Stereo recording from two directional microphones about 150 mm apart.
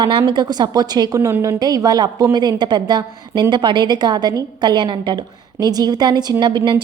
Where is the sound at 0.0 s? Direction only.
30° right (ahead or behind).